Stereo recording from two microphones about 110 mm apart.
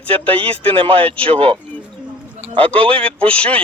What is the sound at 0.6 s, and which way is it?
Speech, 55° right (ahead or behind).